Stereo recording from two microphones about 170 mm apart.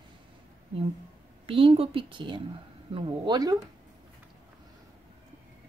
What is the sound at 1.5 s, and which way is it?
Speech, 35° right (ahead or behind).